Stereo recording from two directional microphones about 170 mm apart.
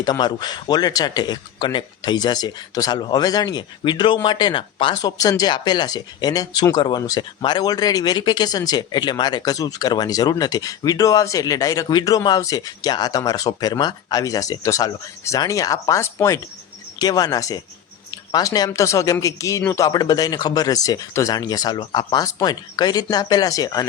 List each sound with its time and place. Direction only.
0.0 s speech: 25° left (ahead or behind)